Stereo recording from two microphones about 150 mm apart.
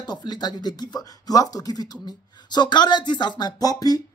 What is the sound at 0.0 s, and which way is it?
Speech, 30° left (ahead or behind).